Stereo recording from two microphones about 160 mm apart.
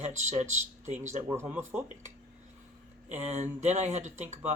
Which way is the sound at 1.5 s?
15° right (ahead or behind).